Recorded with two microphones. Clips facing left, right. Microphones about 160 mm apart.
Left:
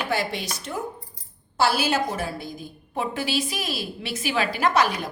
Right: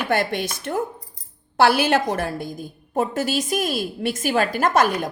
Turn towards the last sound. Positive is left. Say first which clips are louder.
# right 3 dB
turn(degrees=-50)  # may be behind; listen again after turning